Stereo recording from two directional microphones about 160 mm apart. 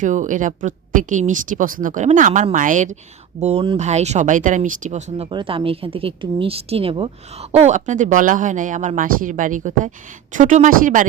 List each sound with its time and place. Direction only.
0.0 s speech: 50° right (ahead or behind)
3.4 s speech: 35° right (ahead or behind); by 11.0 s 55° right (ahead or behind)